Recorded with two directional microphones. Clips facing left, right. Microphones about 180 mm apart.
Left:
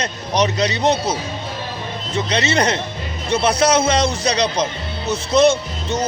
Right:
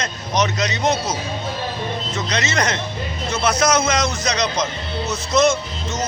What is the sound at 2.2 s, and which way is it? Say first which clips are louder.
Speech: left 5 dB; 30° left (ahead or behind).